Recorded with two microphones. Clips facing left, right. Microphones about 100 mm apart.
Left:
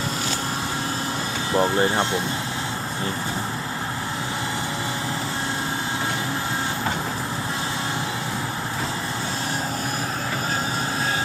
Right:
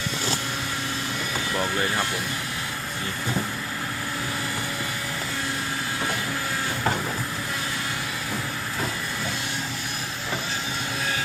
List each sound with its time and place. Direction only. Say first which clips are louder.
1.5 s speech: left 7 dB; 30° left (ahead or behind)